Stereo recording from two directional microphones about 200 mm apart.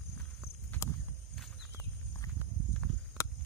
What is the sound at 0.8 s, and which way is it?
Walk, 15° left (ahead or behind).